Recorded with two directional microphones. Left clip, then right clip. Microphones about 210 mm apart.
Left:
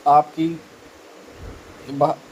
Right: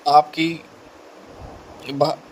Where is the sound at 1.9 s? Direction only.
50° right (ahead or behind).